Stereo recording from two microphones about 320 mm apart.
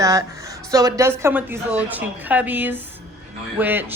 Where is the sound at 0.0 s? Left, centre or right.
Centre.